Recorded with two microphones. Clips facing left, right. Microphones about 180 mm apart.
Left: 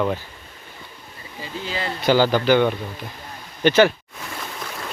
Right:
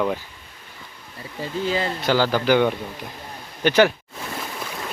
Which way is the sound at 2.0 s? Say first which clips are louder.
Left 6 dB; centre (ahead or behind).